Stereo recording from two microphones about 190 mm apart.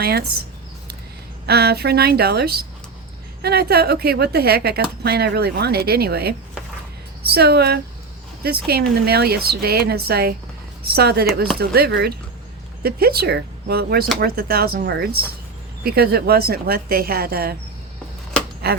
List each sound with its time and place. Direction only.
0.0 s speech: 55° right (ahead or behind)
1.5 s speech: 55° right (ahead or behind)
18.6 s speech: 55° right (ahead or behind)